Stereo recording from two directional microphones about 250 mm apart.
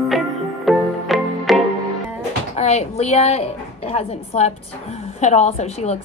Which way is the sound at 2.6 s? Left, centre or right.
Left.